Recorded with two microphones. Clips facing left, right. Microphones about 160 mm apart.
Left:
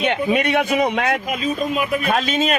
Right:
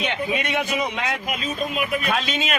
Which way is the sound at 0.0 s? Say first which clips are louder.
Left 6 dB; 60° left (ahead or behind).